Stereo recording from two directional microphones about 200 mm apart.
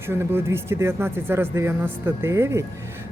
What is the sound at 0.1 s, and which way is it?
A woman's voice, 10° right (ahead or behind).